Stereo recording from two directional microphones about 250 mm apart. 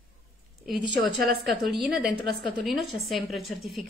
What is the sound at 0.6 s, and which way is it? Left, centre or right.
A woman's voice, centre.